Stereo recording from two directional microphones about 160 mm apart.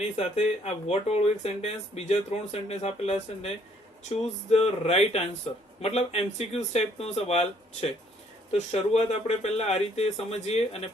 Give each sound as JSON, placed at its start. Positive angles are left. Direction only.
{"t": 0.2, "sound": "speech", "side_deg": 40}
{"t": 4.5, "sound": "speech", "side_deg": 40}